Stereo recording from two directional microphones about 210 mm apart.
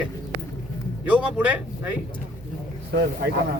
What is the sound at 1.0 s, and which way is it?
Speech, 5° right (ahead or behind).